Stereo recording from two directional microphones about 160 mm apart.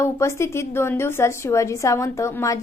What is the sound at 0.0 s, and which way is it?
A woman's voice, 15° left (ahead or behind).